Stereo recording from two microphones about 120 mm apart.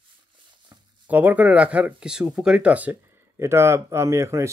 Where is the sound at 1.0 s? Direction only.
15° right (ahead or behind).